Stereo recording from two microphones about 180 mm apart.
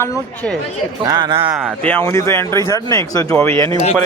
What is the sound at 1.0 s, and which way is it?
Speech, 25° right (ahead or behind).